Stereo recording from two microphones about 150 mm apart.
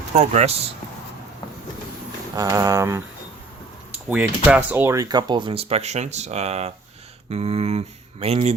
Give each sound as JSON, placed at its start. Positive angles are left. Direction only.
{"t": 0.1, "sound": "speech", "side_deg": -45}
{"t": 2.3, "sound": "speech", "side_deg": -20}
{"t": 4.4, "sound": "speech", "side_deg": -15}